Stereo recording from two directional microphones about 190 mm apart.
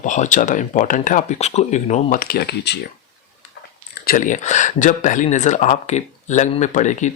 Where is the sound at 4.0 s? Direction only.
45° left (ahead or behind).